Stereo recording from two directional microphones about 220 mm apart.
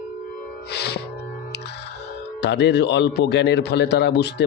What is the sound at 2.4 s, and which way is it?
A man's voice, 50° left (ahead or behind).